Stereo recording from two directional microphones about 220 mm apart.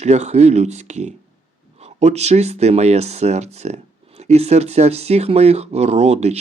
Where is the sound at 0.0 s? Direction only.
30° right (ahead or behind).